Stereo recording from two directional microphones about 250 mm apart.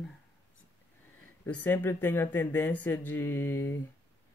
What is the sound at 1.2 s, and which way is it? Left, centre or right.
Speech, centre.